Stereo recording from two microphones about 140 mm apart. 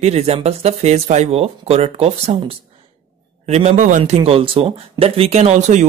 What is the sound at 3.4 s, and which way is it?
Speech, 50° right (ahead or behind).